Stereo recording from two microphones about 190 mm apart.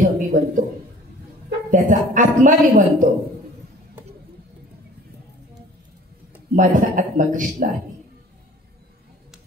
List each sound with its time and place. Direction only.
0.0 s a man's voice: 45° right (ahead or behind)
1.7 s a woman's voice: 45° right (ahead or behind)
6.5 s a woman's voice: 45° right (ahead or behind)